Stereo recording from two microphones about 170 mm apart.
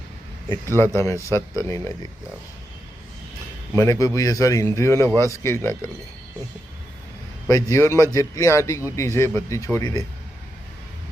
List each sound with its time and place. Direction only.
0.9 s a man's voice: 15° left (ahead or behind)
3.7 s a man's voice: 20° left (ahead or behind)
7.4 s a man's voice: 15° left (ahead or behind)